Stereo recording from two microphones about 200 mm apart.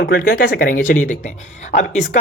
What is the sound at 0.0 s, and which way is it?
Speech, 50° left (ahead or behind).